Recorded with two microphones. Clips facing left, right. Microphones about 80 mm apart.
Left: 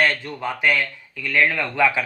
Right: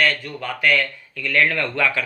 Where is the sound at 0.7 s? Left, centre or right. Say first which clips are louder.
Right 2 dB; centre.